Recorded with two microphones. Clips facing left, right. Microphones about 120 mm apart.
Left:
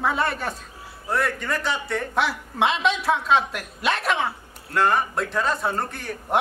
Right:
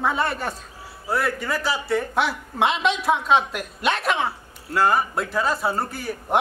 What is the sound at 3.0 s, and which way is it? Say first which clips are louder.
Speech: right 2 dB; 15° right (ahead or behind).